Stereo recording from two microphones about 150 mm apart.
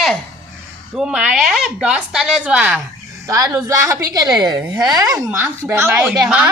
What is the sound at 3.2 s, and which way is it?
A woman's voice, 20° right (ahead or behind).